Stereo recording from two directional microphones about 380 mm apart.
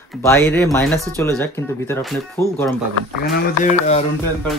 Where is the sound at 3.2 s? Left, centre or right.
Centre.